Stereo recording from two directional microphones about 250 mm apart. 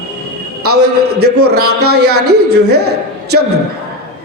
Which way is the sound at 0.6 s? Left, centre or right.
Right.